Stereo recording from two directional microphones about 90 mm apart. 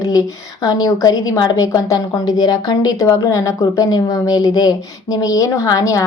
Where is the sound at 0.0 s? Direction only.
40° left (ahead or behind).